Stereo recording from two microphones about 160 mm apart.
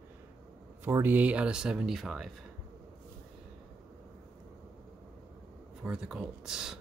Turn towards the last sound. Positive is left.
turn(degrees=-5)  # may be behind; listen again after turning